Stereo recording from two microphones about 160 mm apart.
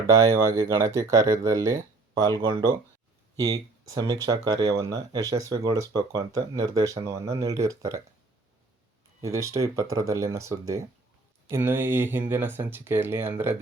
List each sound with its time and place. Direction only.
0.1 s speech: 20° right (ahead or behind)
9.2 s speech: 20° right (ahead or behind)